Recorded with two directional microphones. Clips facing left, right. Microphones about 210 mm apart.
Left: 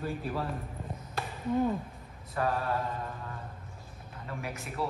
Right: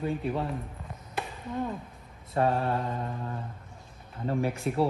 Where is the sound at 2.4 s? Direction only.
25° right (ahead or behind).